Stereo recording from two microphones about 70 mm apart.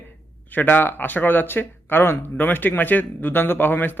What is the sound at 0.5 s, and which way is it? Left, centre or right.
A man's voice, left.